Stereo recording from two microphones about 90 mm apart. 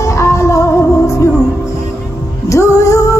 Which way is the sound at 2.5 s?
35° left (ahead or behind).